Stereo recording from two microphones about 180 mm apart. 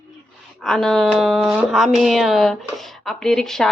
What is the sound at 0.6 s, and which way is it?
Speech, centre (ahead or behind).